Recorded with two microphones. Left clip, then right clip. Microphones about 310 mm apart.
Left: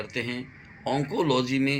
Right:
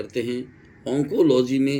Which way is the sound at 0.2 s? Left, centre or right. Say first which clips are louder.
Right 6 dB; centre.